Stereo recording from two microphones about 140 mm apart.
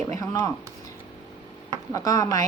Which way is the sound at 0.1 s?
25° left (ahead or behind).